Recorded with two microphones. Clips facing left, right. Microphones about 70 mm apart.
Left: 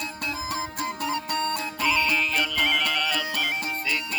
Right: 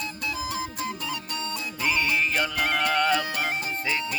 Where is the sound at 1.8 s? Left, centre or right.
Right.